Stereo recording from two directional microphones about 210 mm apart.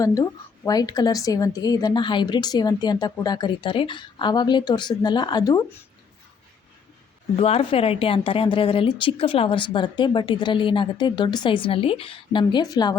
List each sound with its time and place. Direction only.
0.0 s a woman's voice: 15° left (ahead or behind)
7.3 s a woman's voice: 25° left (ahead or behind)